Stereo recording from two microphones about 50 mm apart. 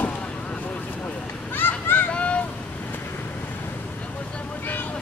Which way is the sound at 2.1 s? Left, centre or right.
Left.